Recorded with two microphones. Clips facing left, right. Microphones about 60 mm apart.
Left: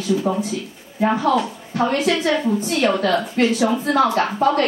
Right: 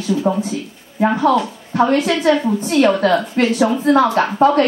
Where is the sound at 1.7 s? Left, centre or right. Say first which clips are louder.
Right 4 dB; right.